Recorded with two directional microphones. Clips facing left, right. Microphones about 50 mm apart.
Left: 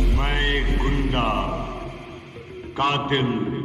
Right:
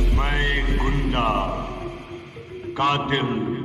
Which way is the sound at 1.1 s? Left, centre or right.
Left.